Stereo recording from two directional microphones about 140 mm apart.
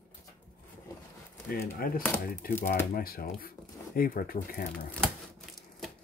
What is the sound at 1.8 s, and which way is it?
Speech, 90° left.